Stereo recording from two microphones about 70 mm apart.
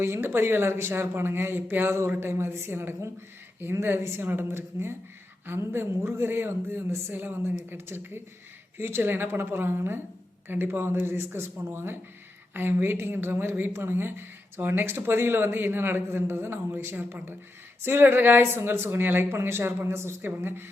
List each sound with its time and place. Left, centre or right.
0.0 s speech: right